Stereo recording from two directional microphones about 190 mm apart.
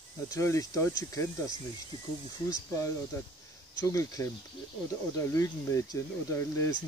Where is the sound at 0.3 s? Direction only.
15° left (ahead or behind).